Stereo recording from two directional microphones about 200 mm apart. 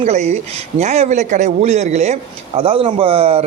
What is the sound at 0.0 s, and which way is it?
A man's voice, 35° right (ahead or behind).